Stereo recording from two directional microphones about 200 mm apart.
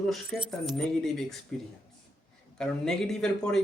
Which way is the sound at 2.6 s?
5° left (ahead or behind).